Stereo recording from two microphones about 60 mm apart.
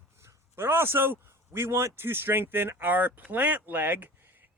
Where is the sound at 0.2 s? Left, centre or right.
Right.